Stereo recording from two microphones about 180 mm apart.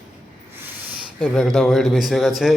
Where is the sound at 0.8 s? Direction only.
Centre (ahead or behind).